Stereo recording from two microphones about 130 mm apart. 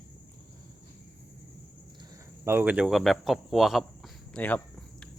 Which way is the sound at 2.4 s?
15° right (ahead or behind).